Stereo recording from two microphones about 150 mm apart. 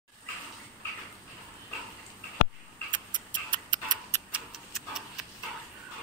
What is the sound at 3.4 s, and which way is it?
Tick-tock, 30° right (ahead or behind).